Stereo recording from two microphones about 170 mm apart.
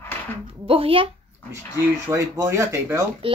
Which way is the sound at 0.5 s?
30° right (ahead or behind).